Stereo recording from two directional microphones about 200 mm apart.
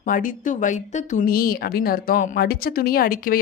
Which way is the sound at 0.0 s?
40° left (ahead or behind).